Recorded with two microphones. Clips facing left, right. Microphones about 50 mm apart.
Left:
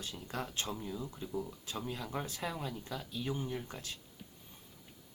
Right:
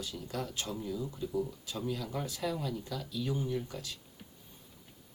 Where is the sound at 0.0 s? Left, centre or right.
Left.